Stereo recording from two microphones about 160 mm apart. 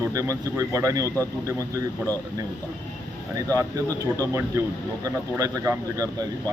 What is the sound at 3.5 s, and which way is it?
Speech, 20° right (ahead or behind).